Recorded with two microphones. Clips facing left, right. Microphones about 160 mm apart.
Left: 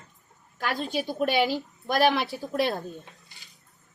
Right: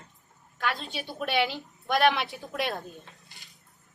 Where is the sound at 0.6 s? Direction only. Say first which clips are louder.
Left 4 dB; 45° left (ahead or behind).